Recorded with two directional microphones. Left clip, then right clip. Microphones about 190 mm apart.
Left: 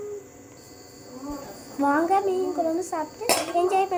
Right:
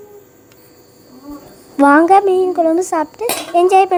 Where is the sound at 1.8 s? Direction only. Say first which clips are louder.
Right 13 dB; 55° right (ahead or behind).